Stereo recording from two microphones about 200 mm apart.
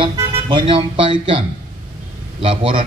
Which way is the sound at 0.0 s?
25° right (ahead or behind).